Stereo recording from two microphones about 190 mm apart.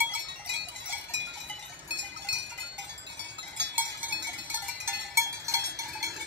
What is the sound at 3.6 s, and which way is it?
Cowbell, 65° right (ahead or behind).